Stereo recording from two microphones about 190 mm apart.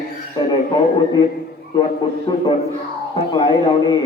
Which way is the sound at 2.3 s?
20° left (ahead or behind).